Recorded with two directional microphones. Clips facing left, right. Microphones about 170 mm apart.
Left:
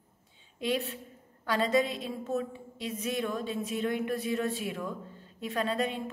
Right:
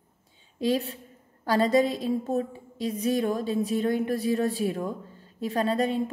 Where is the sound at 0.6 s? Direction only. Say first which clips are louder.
Right 5 dB; 35° right (ahead or behind).